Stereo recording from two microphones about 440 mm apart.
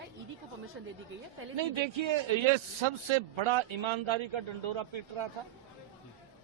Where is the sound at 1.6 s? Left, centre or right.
Right.